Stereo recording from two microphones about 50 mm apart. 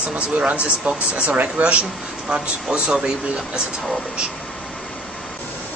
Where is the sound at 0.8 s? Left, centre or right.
Right.